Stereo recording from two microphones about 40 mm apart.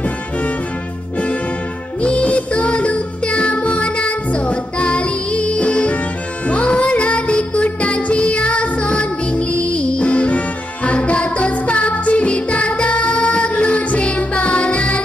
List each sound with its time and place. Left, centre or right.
2.0 s music: left